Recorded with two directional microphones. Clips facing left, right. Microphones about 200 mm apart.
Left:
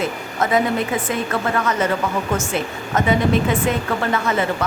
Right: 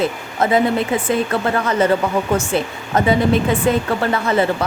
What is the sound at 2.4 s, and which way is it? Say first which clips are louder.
A woman's voice: right 3 dB; 30° right (ahead or behind).